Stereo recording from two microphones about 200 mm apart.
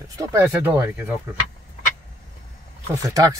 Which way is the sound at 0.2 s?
15° right (ahead or behind).